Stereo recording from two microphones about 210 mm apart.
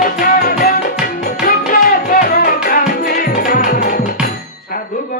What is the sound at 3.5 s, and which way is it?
Music, 40° left (ahead or behind).